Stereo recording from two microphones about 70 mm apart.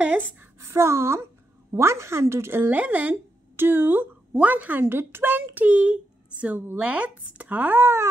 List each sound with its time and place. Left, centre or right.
0.0 s a sound: right
0.6 s a woman's voice: right
2.7 s speech: right